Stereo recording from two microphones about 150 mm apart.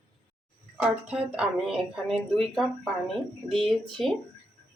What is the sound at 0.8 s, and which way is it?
Speech, 5° right (ahead or behind).